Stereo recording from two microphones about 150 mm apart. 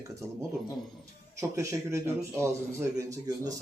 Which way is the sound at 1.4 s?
20° right (ahead or behind).